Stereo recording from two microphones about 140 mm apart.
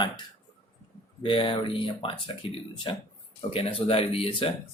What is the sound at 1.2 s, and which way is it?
Speech, 35° left (ahead or behind).